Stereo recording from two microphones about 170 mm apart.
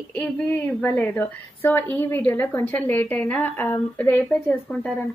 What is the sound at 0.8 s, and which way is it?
A woman's voice, 15° left (ahead or behind).